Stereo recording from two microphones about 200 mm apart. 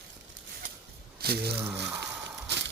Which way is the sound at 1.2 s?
50° right (ahead or behind).